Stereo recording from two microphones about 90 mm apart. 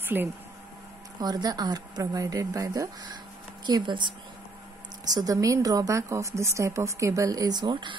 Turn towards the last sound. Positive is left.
turn(degrees=-60)  # may be behind; listen again after turning